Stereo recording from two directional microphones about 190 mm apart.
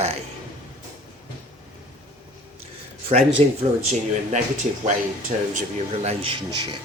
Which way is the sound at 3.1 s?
35° right (ahead or behind).